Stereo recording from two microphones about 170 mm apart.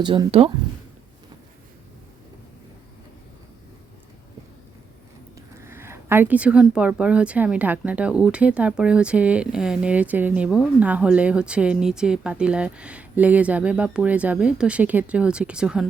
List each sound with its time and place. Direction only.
0.0 s speech: 30° right (ahead or behind)
5.6 s speech: 15° right (ahead or behind)